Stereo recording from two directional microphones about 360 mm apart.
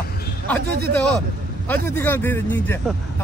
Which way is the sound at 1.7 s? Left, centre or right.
Centre.